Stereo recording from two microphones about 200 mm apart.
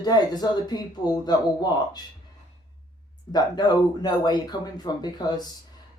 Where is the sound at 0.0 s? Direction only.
20° left (ahead or behind).